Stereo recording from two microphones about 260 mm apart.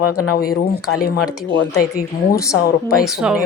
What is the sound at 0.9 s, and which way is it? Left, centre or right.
Speech, left.